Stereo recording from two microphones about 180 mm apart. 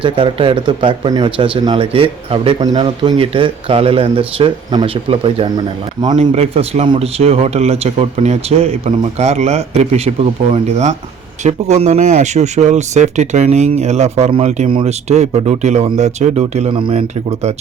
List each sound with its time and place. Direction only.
0.0 s speech: 30° right (ahead or behind)
6.3 s speech: 35° right (ahead or behind)